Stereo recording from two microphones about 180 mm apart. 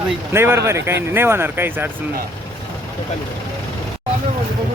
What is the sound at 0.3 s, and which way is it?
Speech, 15° right (ahead or behind).